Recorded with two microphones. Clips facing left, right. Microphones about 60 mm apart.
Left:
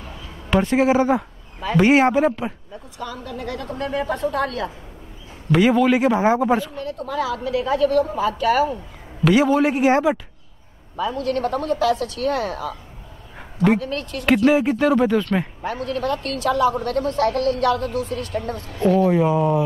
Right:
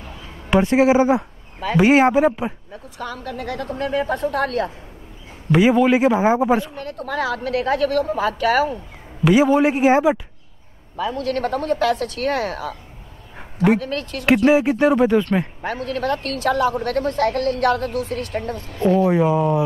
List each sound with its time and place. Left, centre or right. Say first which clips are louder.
0.5 s a man's voice: right 2 dB; centre
2.7 s a woman's voice: right 1 dB; right
5.5 s a man's voice: right 1 dB; centre
6.7 s a woman's voice: even; right
9.2 s a man's voice: right 2 dB; centre
11.0 s a woman's voice: even; right
13.7 s a woman's voice: right 1 dB; right
14.5 s a man's voice: right 2 dB; centre
15.6 s a woman's voice: right 1 dB; right
18.9 s speech: right 1 dB; centre